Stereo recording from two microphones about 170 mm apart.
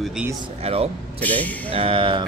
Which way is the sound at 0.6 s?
35° right (ahead or behind).